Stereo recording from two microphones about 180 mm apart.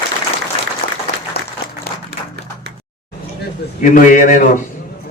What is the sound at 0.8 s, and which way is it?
Applause, 60° left (ahead or behind).